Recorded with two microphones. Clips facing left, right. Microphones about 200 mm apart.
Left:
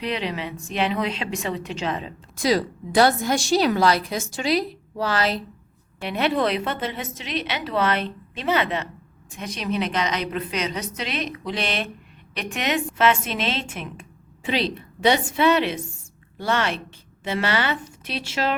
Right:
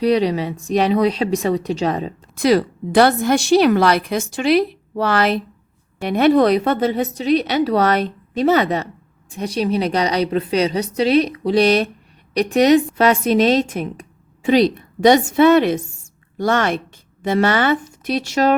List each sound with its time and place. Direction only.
0.0 s a woman's voice: 40° right (ahead or behind)
2.4 s a woman's voice: 60° right (ahead or behind)
6.0 s a woman's voice: 45° right (ahead or behind)